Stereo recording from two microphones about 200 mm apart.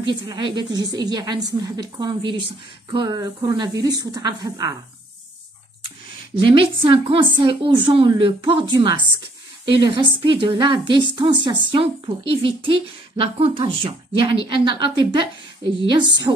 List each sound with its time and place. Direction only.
0.0 s a woman's voice: 25° right (ahead or behind)
6.3 s a woman's voice: 25° right (ahead or behind)